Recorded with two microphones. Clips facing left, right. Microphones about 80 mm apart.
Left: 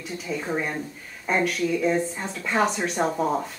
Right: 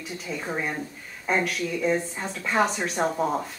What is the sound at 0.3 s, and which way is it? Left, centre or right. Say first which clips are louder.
Speech: left 2 dB; centre.